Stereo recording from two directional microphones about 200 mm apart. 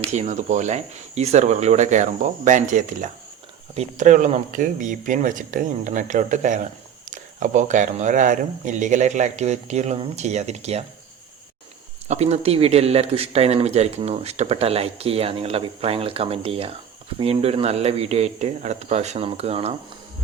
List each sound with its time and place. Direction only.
0.0 s speech: 35° right (ahead or behind)
12.0 s speech: 35° right (ahead or behind)